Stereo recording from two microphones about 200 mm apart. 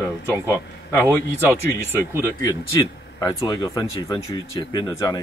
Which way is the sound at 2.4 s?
15° left (ahead or behind).